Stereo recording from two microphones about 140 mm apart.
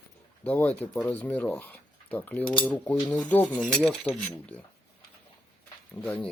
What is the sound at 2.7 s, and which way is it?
Speech, 5° left (ahead or behind).